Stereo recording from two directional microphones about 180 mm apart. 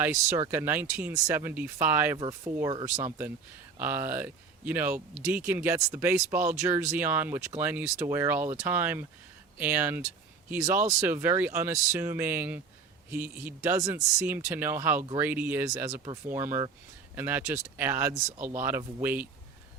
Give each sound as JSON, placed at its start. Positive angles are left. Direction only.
{"t": 0.0, "sound": "speech", "side_deg": -15}
{"t": 2.1, "sound": "speech", "side_deg": -20}